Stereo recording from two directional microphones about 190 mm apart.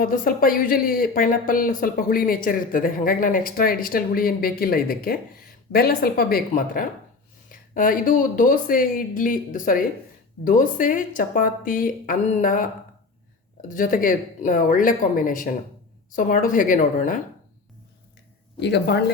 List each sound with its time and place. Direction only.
0.0 s speech: 50° left (ahead or behind)
18.6 s speech: 60° left (ahead or behind)